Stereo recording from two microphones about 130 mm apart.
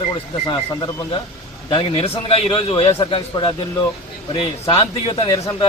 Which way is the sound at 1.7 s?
45° left (ahead or behind).